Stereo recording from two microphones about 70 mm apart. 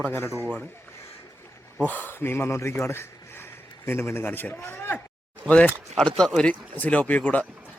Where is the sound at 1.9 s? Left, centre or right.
Left.